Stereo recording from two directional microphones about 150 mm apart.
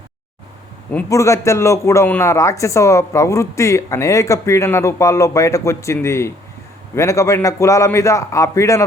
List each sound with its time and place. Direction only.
1.1 s a woman's voice: 20° left (ahead or behind)